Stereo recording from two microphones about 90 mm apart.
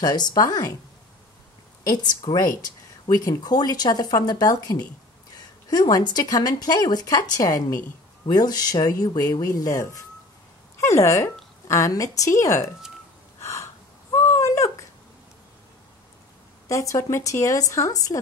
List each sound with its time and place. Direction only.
0.0 s speech: 50° left (ahead or behind)
2.3 s speech: 45° left (ahead or behind)
13.4 s gasp: 30° left (ahead or behind)
14.1 s a sound: 35° left (ahead or behind)
16.6 s speech: 35° left (ahead or behind)